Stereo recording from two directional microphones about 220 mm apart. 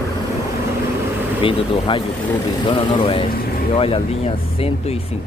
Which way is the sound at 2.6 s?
25° left (ahead or behind).